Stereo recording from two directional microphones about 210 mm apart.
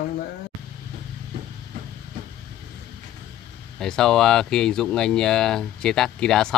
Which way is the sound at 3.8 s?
5° left (ahead or behind).